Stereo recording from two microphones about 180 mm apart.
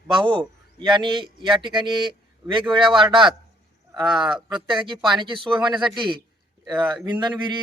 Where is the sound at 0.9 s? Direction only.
25° right (ahead or behind).